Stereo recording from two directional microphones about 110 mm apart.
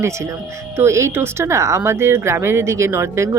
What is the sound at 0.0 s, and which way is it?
A woman's voice, 25° right (ahead or behind).